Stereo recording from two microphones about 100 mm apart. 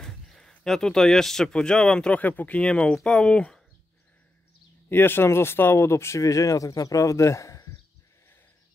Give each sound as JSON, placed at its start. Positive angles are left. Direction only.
{"t": 0.0, "sound": "speech", "side_deg": 5}
{"t": 4.8, "sound": "speech", "side_deg": 20}